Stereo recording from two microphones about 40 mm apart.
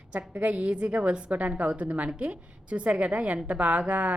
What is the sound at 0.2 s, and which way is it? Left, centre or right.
A woman's voice, right.